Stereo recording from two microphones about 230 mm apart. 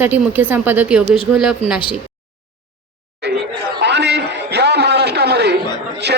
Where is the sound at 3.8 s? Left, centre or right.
Right.